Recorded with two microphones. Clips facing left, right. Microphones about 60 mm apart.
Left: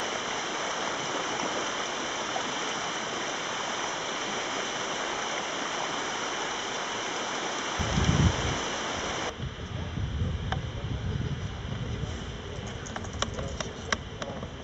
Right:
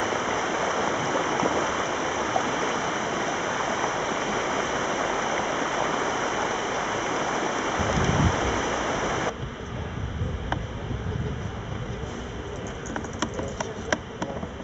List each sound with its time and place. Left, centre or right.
0.0 s stream: right
13.2 s insect: centre